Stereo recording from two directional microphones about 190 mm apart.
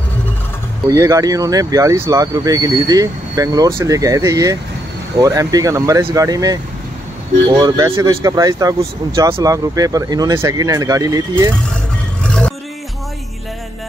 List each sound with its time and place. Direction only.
0.8 s speech: 15° right (ahead or behind)
7.6 s speech: 15° right (ahead or behind)
12.2 s music: 5° left (ahead or behind)